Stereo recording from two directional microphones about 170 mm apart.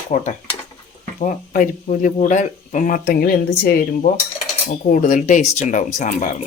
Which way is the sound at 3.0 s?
60° left (ahead or behind).